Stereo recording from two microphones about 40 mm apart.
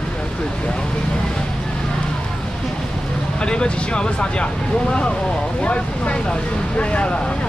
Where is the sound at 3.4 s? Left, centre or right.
Left.